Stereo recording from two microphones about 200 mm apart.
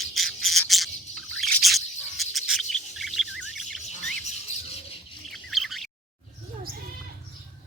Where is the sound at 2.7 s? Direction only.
Centre (ahead or behind).